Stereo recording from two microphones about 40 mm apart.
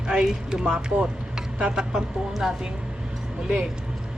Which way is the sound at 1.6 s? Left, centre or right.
Centre.